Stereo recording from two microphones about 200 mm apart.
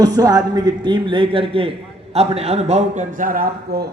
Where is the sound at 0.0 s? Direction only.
20° right (ahead or behind).